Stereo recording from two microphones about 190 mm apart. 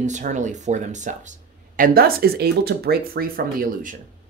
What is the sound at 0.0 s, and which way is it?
Speech, 40° right (ahead or behind).